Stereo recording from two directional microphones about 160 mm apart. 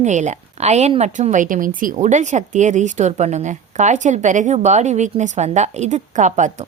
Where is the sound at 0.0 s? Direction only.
45° right (ahead or behind).